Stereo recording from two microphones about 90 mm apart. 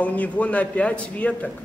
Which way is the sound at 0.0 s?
15° left (ahead or behind).